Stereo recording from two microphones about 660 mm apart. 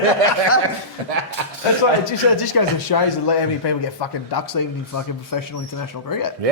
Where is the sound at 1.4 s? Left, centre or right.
Right.